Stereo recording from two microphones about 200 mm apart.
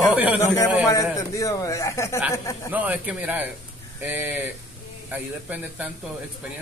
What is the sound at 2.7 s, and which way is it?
A man's voice, 5° right (ahead or behind).